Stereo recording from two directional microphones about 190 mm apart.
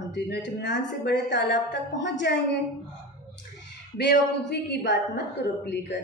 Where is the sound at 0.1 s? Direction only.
65° left (ahead or behind).